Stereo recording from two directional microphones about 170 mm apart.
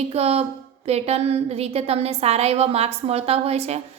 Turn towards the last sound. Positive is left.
turn(degrees=-40)  # may be behind; listen again after turning